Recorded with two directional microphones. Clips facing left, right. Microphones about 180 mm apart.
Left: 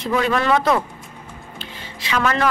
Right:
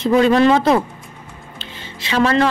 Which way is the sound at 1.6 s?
25° right (ahead or behind).